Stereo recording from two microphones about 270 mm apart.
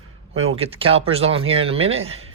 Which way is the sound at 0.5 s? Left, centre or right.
Right.